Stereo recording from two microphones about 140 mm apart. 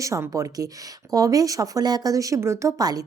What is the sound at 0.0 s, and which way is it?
Speech, 20° right (ahead or behind).